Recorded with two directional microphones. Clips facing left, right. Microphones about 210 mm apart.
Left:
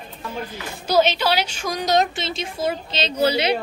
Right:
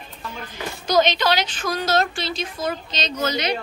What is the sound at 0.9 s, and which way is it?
A woman's voice, 10° left (ahead or behind).